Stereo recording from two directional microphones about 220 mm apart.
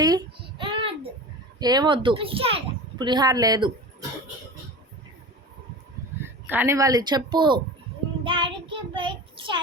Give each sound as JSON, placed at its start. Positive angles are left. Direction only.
{"t": 0.0, "sound": "child singing", "side_deg": -15}
{"t": 1.5, "sound": "a woman's voice", "side_deg": -20}
{"t": 6.2, "sound": "speech", "side_deg": -10}
{"t": 8.2, "sound": "child singing", "side_deg": -25}